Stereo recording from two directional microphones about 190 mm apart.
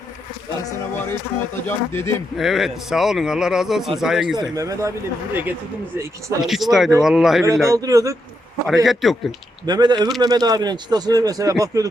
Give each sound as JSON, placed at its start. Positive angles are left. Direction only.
{"t": 1.6, "sound": "speech", "side_deg": 10}
{"t": 2.4, "sound": "a man's voice", "side_deg": 0}
{"t": 4.4, "sound": "a man's voice", "side_deg": -15}
{"t": 7.4, "sound": "speech", "side_deg": -15}
{"t": 8.6, "sound": "a man's voice", "side_deg": 0}
{"t": 9.6, "sound": "speech", "side_deg": -20}